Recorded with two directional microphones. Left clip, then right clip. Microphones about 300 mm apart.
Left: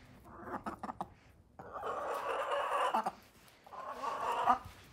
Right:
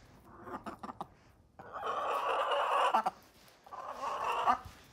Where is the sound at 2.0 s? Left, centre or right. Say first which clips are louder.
Right 6 dB; right.